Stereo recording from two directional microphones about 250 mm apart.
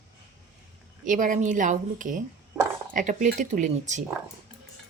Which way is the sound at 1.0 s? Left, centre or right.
Right.